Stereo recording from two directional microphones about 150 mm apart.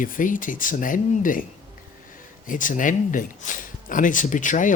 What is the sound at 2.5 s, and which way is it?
Speech, 60° left (ahead or behind).